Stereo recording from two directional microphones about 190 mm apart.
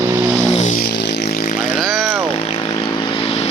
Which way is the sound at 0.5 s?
40° left (ahead or behind).